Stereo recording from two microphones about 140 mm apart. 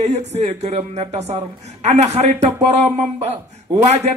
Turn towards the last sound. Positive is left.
turn(degrees=-55)  # may be behind; listen again after turning